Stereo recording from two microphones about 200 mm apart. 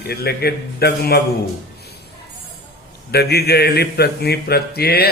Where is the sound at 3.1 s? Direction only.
50° left (ahead or behind).